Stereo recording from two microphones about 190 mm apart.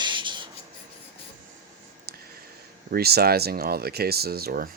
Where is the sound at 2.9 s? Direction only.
55° right (ahead or behind).